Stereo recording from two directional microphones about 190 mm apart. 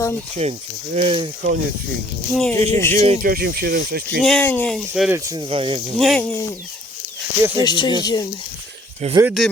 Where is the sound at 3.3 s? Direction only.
55° right (ahead or behind).